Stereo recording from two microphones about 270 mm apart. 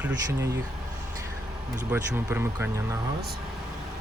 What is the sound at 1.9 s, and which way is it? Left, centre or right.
Speech, centre.